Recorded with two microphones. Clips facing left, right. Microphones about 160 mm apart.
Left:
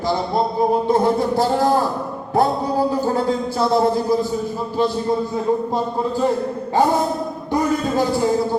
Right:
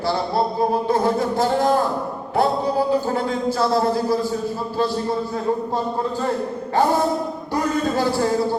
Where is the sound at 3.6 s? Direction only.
20° left (ahead or behind).